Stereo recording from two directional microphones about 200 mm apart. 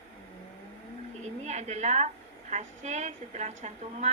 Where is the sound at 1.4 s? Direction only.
35° right (ahead or behind).